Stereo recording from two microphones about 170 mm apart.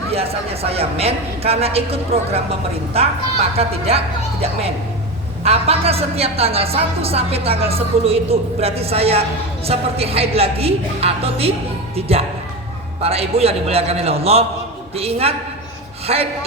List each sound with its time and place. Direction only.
0.1 s a woman's voice: 35° right (ahead or behind)
3.6 s a woman's voice: 35° right (ahead or behind)